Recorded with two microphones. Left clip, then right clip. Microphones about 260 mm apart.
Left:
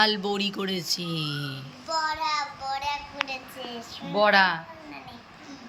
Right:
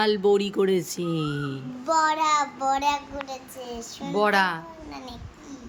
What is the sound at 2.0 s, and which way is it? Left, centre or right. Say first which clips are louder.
Child singing: right 5 dB; right.